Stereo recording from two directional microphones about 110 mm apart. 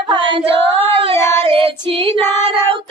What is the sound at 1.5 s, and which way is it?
Female singing, 55° right (ahead or behind).